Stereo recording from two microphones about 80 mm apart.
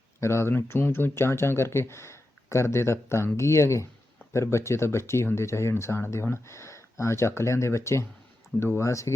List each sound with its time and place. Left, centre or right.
0.2 s speech: left
4.2 s a sound: left
4.5 s speech: left